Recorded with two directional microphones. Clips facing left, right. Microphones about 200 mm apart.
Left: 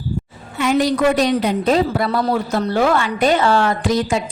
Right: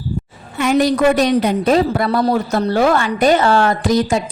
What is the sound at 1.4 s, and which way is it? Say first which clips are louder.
A woman's voice: right 2 dB; 50° right (ahead or behind).